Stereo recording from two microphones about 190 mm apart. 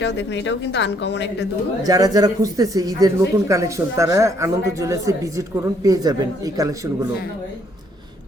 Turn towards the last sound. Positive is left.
turn(degrees=-20)  # may be behind; listen again after turning